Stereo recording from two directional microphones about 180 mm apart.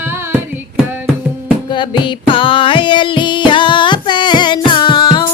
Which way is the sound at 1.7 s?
25° left (ahead or behind).